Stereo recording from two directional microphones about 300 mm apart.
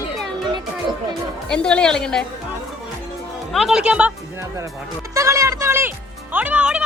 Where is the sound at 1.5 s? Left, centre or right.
Centre.